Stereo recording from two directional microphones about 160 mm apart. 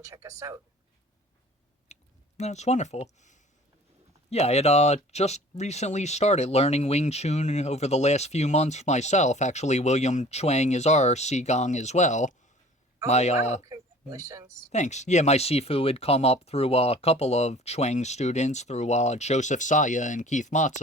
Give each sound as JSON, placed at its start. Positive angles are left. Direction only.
{"t": 0.0, "sound": "speech", "side_deg": -20}
{"t": 1.9, "sound": "chewing", "side_deg": 45}
{"t": 2.4, "sound": "speech", "side_deg": 45}
{"t": 13.7, "sound": "speech", "side_deg": -20}
{"t": 14.7, "sound": "speech", "side_deg": 45}